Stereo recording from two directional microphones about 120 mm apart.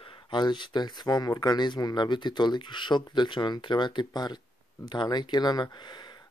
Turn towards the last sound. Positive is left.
turn(degrees=40)  # may be behind; listen again after turning